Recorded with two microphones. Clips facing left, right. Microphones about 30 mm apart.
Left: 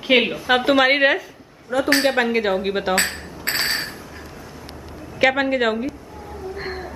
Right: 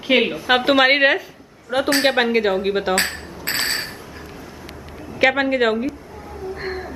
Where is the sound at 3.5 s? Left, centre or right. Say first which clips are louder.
Even; centre.